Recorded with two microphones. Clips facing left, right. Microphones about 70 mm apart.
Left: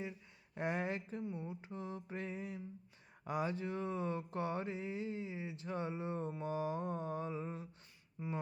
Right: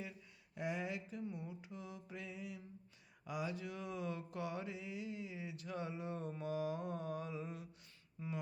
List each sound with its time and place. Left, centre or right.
0.5 s speech: left
1.3 s mantra: left
8.2 s mantra: centre